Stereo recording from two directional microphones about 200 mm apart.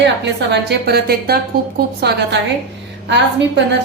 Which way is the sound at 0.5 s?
55° right (ahead or behind).